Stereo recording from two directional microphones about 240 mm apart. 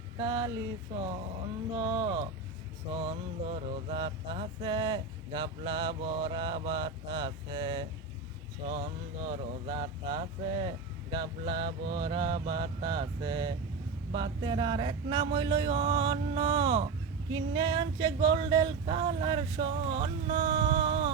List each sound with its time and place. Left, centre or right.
0.2 s speech: centre
1.7 s mantra: centre
9.2 s mantra: right